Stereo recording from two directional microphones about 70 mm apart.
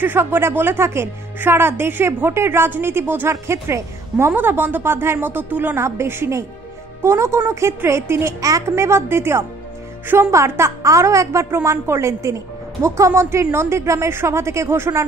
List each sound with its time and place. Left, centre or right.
0.0 s a woman's voice: right
5.8 s a woman's voice: right